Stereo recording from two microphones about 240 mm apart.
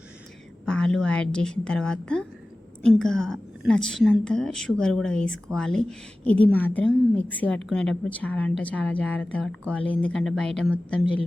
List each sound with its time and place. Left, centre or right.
0.6 s a woman's voice: centre
11.0 s speech: left